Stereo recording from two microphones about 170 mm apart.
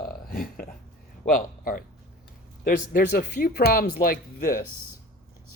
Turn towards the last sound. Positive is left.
turn(degrees=60)  # may be behind; listen again after turning